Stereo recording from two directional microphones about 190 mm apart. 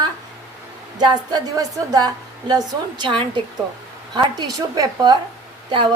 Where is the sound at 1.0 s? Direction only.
20° right (ahead or behind).